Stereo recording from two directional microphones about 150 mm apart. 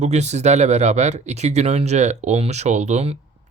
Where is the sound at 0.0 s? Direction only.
50° right (ahead or behind).